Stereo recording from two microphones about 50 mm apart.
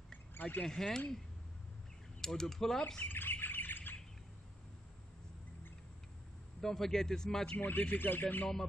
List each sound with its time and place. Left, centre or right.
0.3 s a sound: left
0.7 s speech: centre
2.2 s speech: centre
3.0 s bird: left
6.6 s speech: centre
7.5 s speech: left